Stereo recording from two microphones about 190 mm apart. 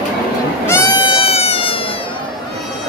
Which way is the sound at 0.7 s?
20° left (ahead or behind).